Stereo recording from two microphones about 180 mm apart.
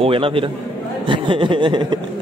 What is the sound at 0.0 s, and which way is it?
Speech, 30° right (ahead or behind).